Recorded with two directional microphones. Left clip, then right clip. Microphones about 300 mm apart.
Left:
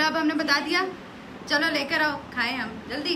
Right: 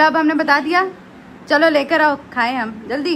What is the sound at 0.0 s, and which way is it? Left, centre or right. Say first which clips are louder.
A woman's voice: right 10 dB; centre.